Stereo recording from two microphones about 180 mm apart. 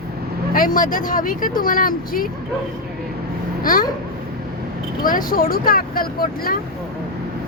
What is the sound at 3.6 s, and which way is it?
Babbling, 50° left (ahead or behind).